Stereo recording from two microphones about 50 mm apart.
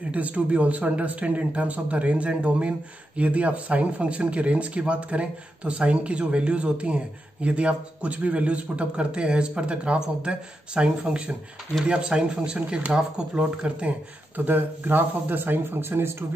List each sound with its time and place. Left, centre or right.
0.1 s speech: right